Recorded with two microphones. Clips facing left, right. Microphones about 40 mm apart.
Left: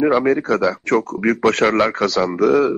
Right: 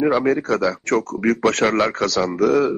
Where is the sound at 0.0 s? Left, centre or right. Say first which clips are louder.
Left 2 dB; centre.